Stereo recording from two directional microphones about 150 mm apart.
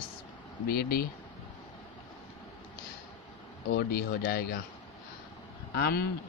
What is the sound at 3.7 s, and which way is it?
Speech, 90° left.